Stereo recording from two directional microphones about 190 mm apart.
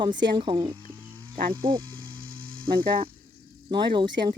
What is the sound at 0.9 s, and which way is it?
Wild animals, 25° right (ahead or behind).